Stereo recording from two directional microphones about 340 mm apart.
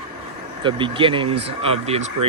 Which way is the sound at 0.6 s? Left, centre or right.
Centre.